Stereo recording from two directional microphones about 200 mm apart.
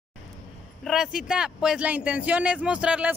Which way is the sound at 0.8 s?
Centre (ahead or behind).